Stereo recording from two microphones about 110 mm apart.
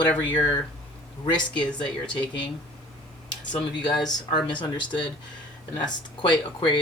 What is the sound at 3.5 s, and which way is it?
Speech, 40° left (ahead or behind).